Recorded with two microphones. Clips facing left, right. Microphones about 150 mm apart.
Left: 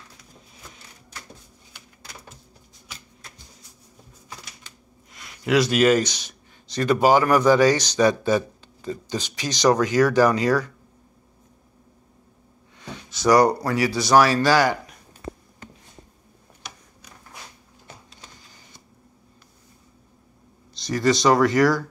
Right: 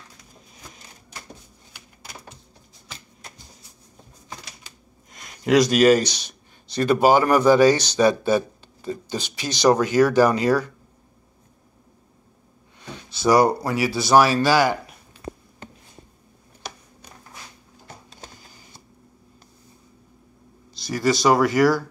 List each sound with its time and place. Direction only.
5.1 s a man's voice: 40° right (ahead or behind)
6.7 s speech: 10° right (ahead or behind)
13.2 s speech: 5° right (ahead or behind)
13.9 s speech: 25° right (ahead or behind)
14.4 s speech: 5° right (ahead or behind)
17.8 s a sound: 45° right (ahead or behind)
20.7 s speech: 5° right (ahead or behind)